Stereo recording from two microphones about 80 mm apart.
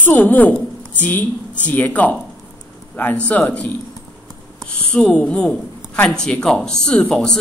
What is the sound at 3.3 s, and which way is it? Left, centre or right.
Speech, centre.